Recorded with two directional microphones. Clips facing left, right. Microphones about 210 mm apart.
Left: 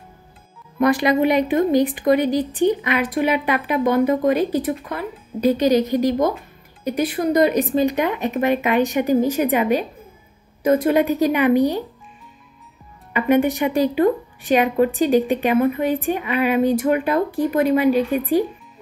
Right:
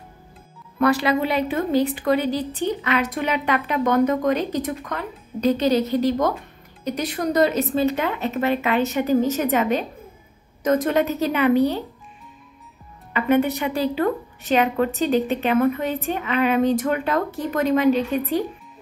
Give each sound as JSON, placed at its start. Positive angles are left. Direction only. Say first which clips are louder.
{"t": 0.7, "sound": "speech", "louder": "left 3 dB", "side_deg": 15}
{"t": 13.1, "sound": "speech", "louder": "left 2 dB", "side_deg": 15}